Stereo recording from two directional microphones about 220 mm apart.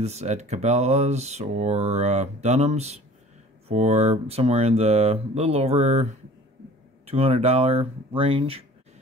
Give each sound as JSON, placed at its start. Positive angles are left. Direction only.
{"t": 0.0, "sound": "speech", "side_deg": -30}
{"t": 7.1, "sound": "speech", "side_deg": -25}